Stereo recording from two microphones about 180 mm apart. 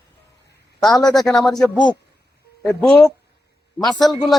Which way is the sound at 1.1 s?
Centre (ahead or behind).